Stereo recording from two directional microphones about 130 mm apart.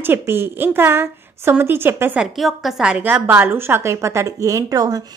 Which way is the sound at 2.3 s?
Centre (ahead or behind).